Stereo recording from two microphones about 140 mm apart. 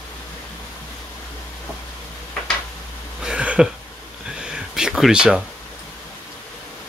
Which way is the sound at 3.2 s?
10° right (ahead or behind).